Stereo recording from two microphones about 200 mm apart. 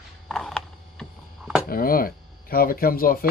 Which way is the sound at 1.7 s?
45° left (ahead or behind).